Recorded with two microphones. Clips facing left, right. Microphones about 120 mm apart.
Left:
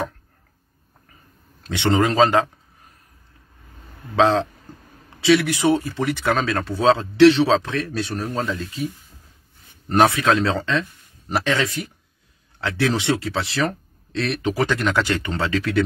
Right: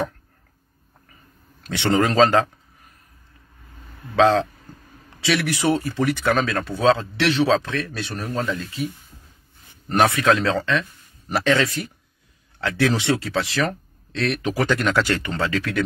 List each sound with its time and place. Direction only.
1.6 s speech: 20° left (ahead or behind)
4.1 s speech: 20° left (ahead or behind)
4.7 s a sound: 30° left (ahead or behind)
5.2 s speech: 20° left (ahead or behind)
9.9 s speech: 20° left (ahead or behind)